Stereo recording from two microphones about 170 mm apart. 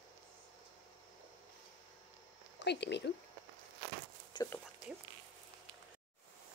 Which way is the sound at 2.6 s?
90° left.